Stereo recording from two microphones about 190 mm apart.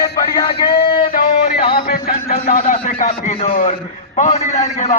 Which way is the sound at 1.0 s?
50° left (ahead or behind).